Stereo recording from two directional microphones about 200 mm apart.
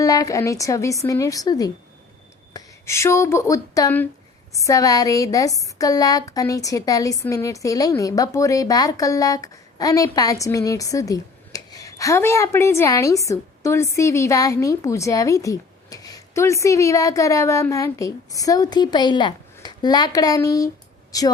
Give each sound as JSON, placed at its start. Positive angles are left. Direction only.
{"t": 0.0, "sound": "a woman's voice", "side_deg": 15}